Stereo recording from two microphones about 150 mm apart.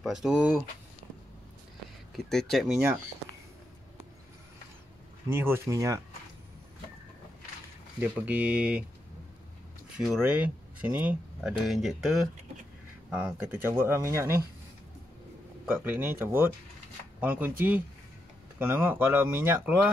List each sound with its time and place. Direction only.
0.0 s speech: 5° right (ahead or behind)
2.1 s speech: centre (ahead or behind)
5.3 s speech: 15° right (ahead or behind)
8.0 s speech: 10° right (ahead or behind)
9.9 s speech: 5° right (ahead or behind)
13.1 s speech: 10° right (ahead or behind)
15.6 s speech: 10° right (ahead or behind)